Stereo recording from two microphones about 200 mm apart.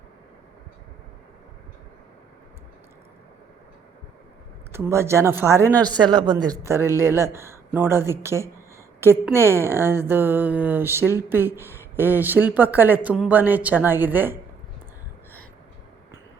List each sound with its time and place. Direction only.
4.7 s speech: 15° right (ahead or behind)